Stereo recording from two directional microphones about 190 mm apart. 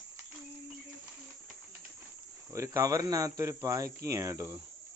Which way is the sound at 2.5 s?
15° right (ahead or behind).